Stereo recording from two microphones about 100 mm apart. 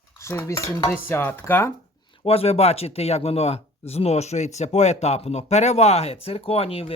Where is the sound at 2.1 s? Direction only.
65° left (ahead or behind).